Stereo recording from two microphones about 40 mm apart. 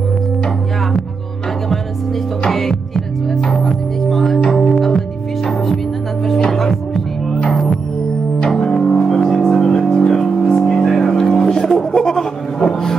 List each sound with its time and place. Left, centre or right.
2.4 s music: centre
6.5 s music: centre
8.4 s double bass: centre
8.9 s music: centre